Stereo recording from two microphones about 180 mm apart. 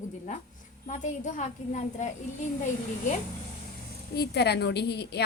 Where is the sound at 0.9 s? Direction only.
40° left (ahead or behind).